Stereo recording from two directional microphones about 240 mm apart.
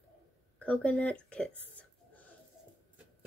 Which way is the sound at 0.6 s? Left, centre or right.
Centre.